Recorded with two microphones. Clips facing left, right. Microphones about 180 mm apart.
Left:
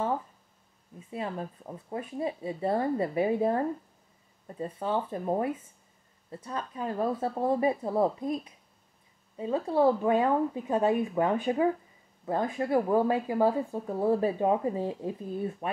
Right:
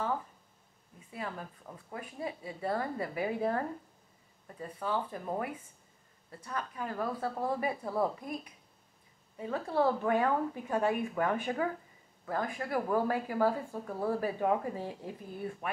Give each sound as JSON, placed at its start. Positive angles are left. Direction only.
{"t": 0.9, "sound": "speech", "side_deg": 25}